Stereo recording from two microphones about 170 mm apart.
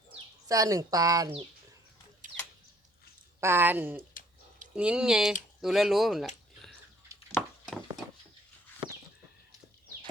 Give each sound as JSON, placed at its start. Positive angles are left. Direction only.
{"t": 0.4, "sound": "speech", "side_deg": -20}
{"t": 2.2, "sound": "a sound", "side_deg": -50}
{"t": 3.4, "sound": "speech", "side_deg": -15}